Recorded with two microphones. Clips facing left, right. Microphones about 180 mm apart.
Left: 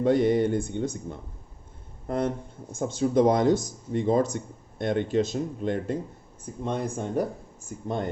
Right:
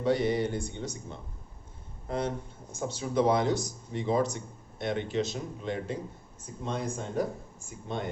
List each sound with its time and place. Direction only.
0.0 s speech: 50° left (ahead or behind)